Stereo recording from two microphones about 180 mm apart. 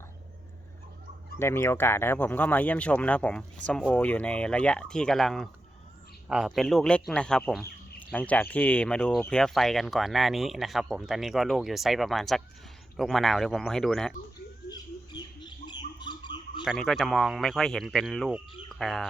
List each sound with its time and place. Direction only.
1.4 s speech: 15° left (ahead or behind)
14.7 s a sound: 25° left (ahead or behind)
16.6 s speech: centre (ahead or behind)